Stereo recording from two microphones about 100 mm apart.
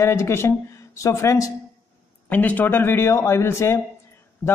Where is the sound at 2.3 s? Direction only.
15° left (ahead or behind).